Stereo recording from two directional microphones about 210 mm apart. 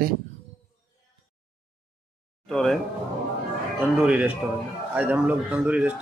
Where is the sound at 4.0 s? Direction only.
5° right (ahead or behind).